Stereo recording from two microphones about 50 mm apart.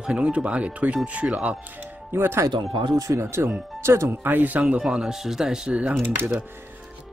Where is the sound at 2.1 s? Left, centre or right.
Right.